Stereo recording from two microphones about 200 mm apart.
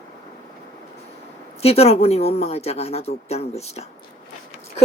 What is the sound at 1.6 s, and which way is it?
Speech, 30° left (ahead or behind).